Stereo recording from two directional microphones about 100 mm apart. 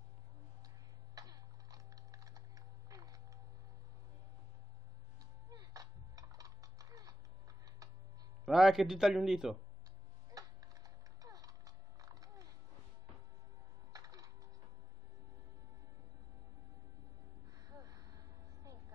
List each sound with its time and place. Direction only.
1.1 s typing: 40° right (ahead or behind)
5.5 s typing: 40° right (ahead or behind)
8.5 s a man's voice: 5° right (ahead or behind)
10.3 s a sound: 35° right (ahead or behind)
13.9 s music: 35° right (ahead or behind)
17.6 s a sound: 35° right (ahead or behind)